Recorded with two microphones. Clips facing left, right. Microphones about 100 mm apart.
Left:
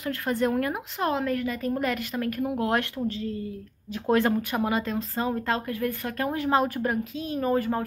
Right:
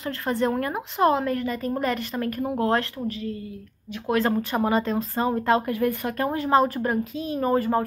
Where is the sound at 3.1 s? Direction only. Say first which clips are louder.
Even; 30° left (ahead or behind).